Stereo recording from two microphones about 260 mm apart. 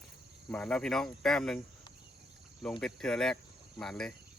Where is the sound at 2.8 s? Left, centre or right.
Centre.